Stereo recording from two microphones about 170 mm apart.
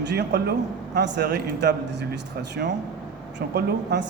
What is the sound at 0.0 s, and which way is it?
A man's voice, 85° right.